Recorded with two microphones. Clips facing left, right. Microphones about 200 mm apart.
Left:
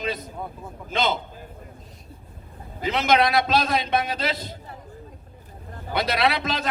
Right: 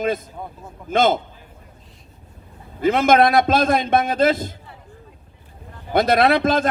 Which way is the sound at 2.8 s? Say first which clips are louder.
Right 6 dB; 50° right (ahead or behind).